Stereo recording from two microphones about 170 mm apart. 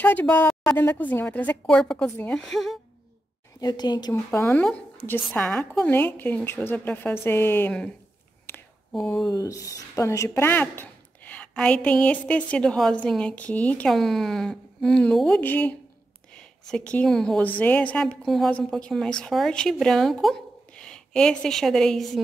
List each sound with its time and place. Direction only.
0.0 s speech: 10° left (ahead or behind)
3.6 s speech: 25° left (ahead or behind)
4.1 s speech: 15° left (ahead or behind)
8.9 s a woman's voice: centre (ahead or behind)
9.2 s a woman's voice: 20° left (ahead or behind); by 22.2 s centre (ahead or behind)